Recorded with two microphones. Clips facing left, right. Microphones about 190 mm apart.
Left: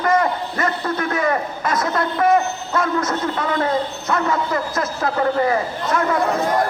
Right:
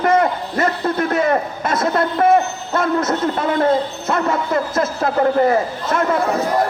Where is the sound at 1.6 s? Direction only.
25° right (ahead or behind).